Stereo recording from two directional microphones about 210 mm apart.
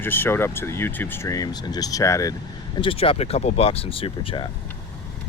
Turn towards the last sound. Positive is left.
turn(degrees=30)  # may be behind; listen again after turning